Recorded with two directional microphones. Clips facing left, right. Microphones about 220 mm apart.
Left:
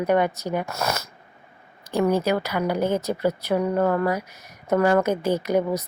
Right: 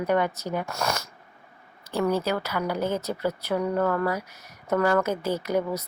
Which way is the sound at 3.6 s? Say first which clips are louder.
Left 3 dB; 25° left (ahead or behind).